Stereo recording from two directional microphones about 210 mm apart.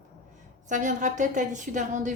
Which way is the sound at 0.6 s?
35° right (ahead or behind).